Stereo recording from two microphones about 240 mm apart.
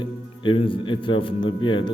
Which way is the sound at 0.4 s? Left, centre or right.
Left.